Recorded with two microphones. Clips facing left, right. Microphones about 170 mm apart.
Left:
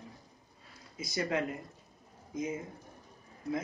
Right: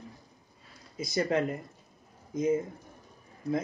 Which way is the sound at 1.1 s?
40° right (ahead or behind).